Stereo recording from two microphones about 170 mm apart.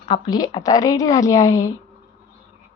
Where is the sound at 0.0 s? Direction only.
25° left (ahead or behind).